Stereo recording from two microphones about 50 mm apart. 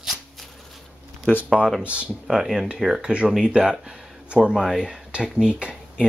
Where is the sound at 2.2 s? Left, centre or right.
Centre.